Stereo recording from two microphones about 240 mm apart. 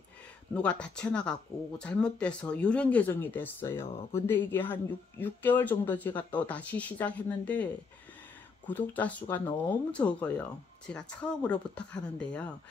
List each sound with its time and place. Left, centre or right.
0.6 s speech: centre